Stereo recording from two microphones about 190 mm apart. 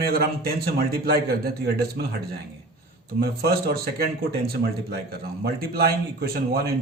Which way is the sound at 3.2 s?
55° right (ahead or behind).